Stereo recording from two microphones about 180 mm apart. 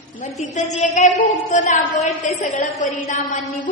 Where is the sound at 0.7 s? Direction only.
40° left (ahead or behind).